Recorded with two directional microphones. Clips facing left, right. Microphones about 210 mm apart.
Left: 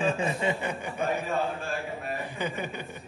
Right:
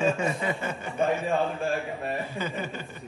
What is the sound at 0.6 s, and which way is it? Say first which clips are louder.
Speech: even; 15° left (ahead or behind).